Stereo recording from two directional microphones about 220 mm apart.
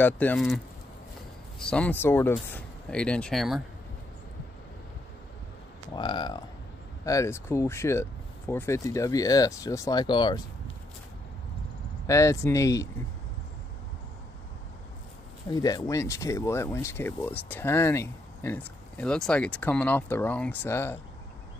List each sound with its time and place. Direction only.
0.0 s speech: 5° left (ahead or behind)
1.6 s speech: 5° left (ahead or behind)
5.9 s speech: 20° left (ahead or behind)
12.1 s speech: 15° left (ahead or behind)
15.5 s speech: 15° left (ahead or behind)